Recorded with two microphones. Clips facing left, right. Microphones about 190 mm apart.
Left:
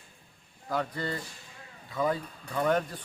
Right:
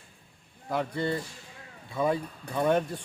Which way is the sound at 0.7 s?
25° right (ahead or behind).